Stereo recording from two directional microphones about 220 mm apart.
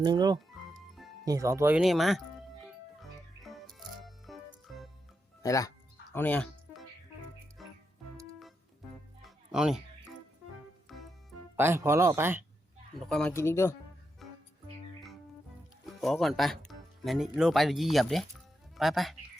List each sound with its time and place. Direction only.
0.0 s speech: 20° right (ahead or behind); by 2.2 s centre (ahead or behind)
3.0 s music: centre (ahead or behind)
5.4 s speech: 15° left (ahead or behind)
6.1 s music: 5° left (ahead or behind)
9.2 s music: 5° right (ahead or behind)
10.9 s music: centre (ahead or behind)
11.5 s speech: 10° right (ahead or behind)
13.1 s speech: 5° left (ahead or behind)
14.2 s music: centre (ahead or behind)
16.0 s speech: centre (ahead or behind)